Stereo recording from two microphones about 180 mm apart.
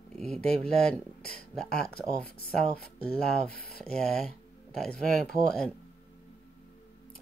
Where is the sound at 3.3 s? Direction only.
5° left (ahead or behind).